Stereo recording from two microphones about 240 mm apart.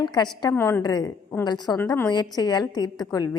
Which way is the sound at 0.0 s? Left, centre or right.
Centre.